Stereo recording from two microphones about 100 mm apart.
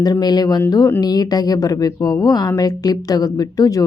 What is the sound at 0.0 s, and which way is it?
A woman's voice, 40° left (ahead or behind).